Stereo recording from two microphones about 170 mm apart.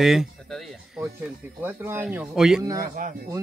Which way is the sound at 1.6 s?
15° right (ahead or behind).